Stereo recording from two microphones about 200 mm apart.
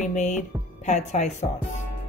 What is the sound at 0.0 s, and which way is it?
Speech, 35° left (ahead or behind).